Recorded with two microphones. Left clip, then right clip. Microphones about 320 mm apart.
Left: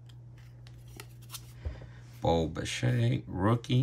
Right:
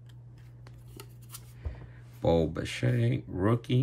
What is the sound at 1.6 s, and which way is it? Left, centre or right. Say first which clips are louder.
Speech: left 1 dB; centre.